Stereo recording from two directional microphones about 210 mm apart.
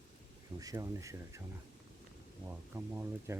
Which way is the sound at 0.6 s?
15° right (ahead or behind).